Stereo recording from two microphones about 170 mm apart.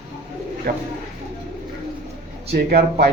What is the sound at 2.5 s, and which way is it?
Speech, 70° right (ahead or behind).